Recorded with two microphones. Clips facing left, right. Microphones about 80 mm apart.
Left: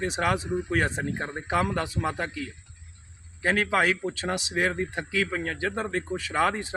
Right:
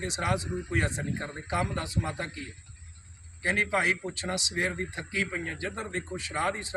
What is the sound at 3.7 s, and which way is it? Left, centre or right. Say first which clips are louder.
Speech: left 4 dB; left.